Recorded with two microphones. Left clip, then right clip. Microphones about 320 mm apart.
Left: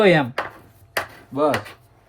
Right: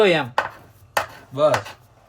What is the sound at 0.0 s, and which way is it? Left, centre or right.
Chopping, centre.